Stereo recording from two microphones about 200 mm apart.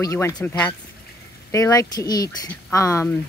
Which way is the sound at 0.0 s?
15° left (ahead or behind).